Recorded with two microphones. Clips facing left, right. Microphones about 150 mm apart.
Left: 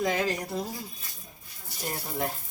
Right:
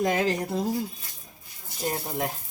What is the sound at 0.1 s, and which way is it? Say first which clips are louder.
Speech: right 3 dB; 25° right (ahead or behind).